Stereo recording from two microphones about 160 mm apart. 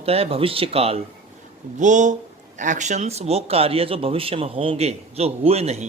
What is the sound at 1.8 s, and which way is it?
Speech, 50° right (ahead or behind).